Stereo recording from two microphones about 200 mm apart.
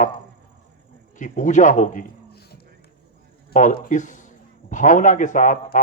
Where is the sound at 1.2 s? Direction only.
40° left (ahead or behind).